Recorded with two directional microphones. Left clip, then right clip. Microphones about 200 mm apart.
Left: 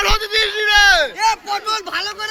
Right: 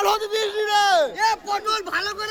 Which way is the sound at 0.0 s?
20° right (ahead or behind).